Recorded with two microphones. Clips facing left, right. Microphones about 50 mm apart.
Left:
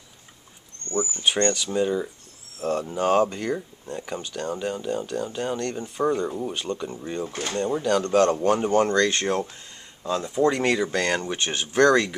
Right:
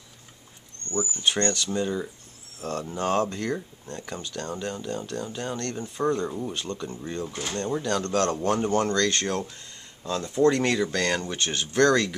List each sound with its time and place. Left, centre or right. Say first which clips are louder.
1.2 s speech: left 2 dB; centre